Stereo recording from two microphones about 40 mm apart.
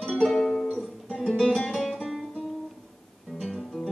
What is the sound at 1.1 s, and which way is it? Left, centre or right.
Music, centre.